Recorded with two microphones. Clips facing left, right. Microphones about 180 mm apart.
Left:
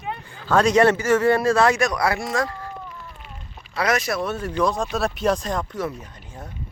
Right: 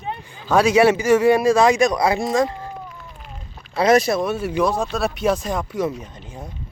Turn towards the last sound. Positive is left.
turn(degrees=-15)  # may be behind; listen again after turning